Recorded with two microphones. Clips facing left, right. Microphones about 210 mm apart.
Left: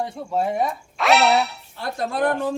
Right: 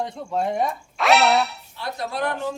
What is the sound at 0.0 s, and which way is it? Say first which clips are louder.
Speech: left 1 dB; 5° left (ahead or behind).